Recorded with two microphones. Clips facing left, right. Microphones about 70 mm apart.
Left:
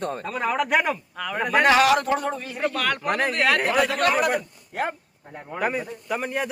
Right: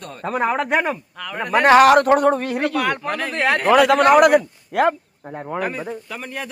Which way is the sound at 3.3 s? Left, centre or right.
Right.